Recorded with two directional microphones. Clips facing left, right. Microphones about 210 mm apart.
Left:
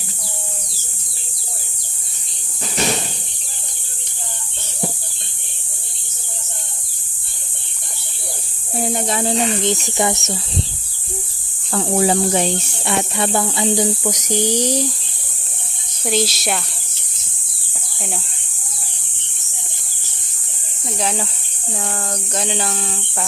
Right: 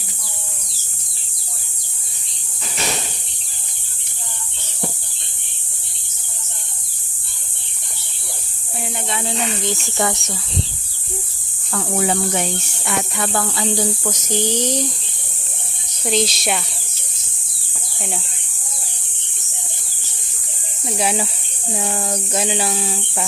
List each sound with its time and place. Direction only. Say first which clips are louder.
8.8 s speech: left 6 dB; 40° left (ahead or behind)
9.6 s speech: left 3 dB; 20° left (ahead or behind)
11.7 s speech: left 4 dB; 30° left (ahead or behind); by 14.8 s 10° left (ahead or behind)
16.0 s speech: even; 5° left (ahead or behind)
21.0 s speech: right 2 dB; 10° right (ahead or behind)